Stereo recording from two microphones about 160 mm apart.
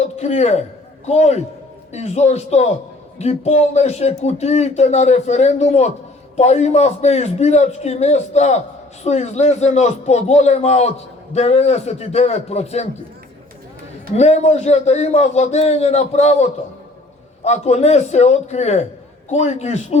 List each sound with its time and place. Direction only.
0.0 s a man's voice: 45° left (ahead or behind)
14.2 s speech: 40° left (ahead or behind)